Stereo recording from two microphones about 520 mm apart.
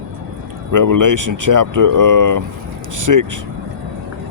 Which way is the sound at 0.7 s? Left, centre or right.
Right.